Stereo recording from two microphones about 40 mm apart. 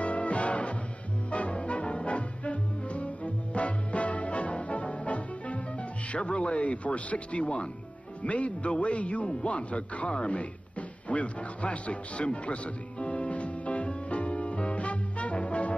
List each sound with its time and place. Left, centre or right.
0.0 s music: left
1.3 s brass instrument: left
6.1 s speech: left
13.0 s music: left